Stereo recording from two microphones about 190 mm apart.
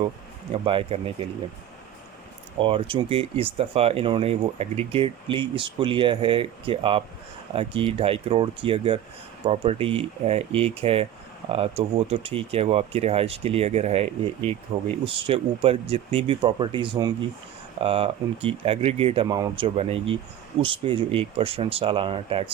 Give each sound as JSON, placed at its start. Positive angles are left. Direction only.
{"t": 0.5, "sound": "speech", "side_deg": -30}
{"t": 2.6, "sound": "speech", "side_deg": -30}